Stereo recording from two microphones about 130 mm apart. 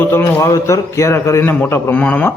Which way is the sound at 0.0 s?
15° left (ahead or behind).